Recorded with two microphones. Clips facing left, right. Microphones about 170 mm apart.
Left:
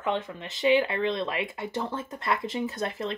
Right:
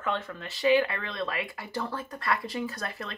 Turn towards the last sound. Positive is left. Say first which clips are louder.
# left 4 dB
turn(degrees=25)  # may be behind; listen again after turning